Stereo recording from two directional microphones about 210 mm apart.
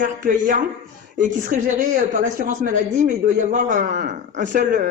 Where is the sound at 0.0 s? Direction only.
40° right (ahead or behind).